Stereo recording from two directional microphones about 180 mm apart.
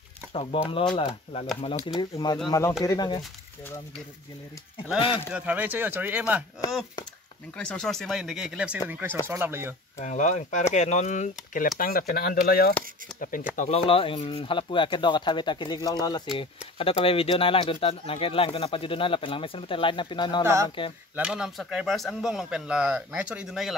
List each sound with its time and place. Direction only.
0.3 s speech: 35° left (ahead or behind)
4.9 s speech: 30° left (ahead or behind)
5.3 s speech: 10° right (ahead or behind)
7.5 s speech: 5° left (ahead or behind); by 9.8 s 10° right (ahead or behind)
9.9 s speech: 40° left (ahead or behind)
11.8 s speech: 55° left (ahead or behind)
13.6 s speech: 35° left (ahead or behind)
21.2 s speech: 5° right (ahead or behind)